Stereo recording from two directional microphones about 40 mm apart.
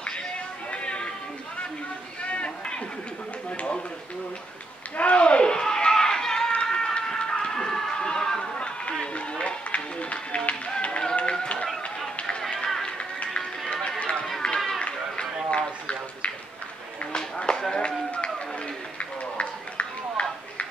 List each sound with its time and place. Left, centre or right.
0.7 s music: left
4.9 s a sound: left
9.0 s music: left
11.1 s tap: left
12.4 s run: centre
12.8 s music: left
13.8 s run: left
15.5 s a sound: left
17.0 s run: left
17.8 s run: left